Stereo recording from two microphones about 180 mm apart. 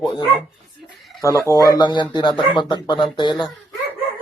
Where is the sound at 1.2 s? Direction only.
20° left (ahead or behind).